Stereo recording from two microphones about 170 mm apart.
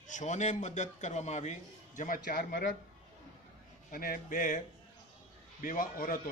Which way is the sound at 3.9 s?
55° left (ahead or behind).